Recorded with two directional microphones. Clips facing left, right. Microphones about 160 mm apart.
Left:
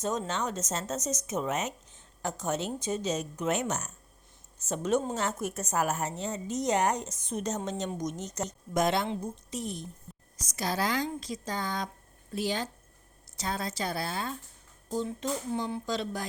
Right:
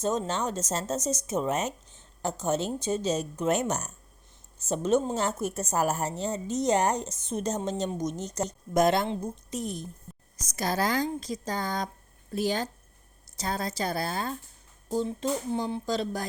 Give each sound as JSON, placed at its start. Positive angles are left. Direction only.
{"t": 0.0, "sound": "a woman's voice", "side_deg": -30}